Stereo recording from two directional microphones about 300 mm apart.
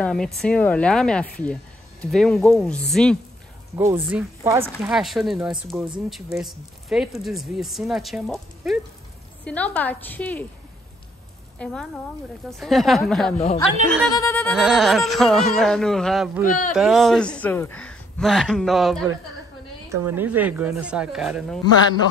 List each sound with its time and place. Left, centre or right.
0.0 s speech: centre
3.7 s speech: centre
11.5 s speech: centre
16.4 s speech: left
16.7 s speech: centre